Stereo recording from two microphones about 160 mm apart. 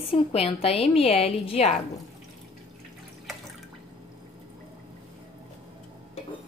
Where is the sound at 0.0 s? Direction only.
40° left (ahead or behind).